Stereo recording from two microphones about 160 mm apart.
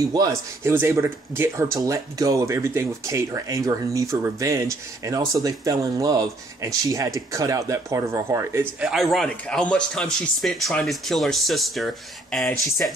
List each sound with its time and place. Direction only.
0.1 s speech: 20° right (ahead or behind)
8.8 s speech: centre (ahead or behind)